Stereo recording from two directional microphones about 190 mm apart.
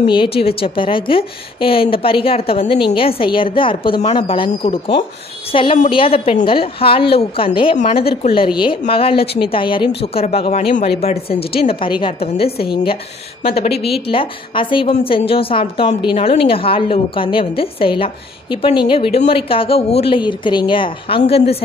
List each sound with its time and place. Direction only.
0.0 s a woman's voice: 25° left (ahead or behind)